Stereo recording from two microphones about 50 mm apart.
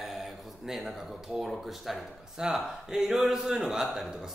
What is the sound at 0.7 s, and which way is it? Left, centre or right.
Speech, centre.